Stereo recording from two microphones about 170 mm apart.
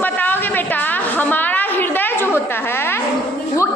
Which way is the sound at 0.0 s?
10° left (ahead or behind).